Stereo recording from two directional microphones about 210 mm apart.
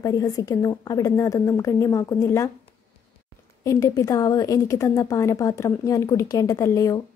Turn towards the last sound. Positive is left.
turn(degrees=15)  # may be behind; listen again after turning